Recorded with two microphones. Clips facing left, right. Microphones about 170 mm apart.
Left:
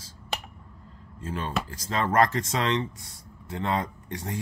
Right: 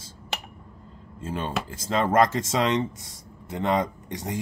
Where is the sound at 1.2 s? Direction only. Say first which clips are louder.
Right 1 dB; 25° right (ahead or behind).